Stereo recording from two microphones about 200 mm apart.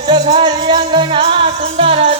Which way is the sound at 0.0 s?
25° right (ahead or behind).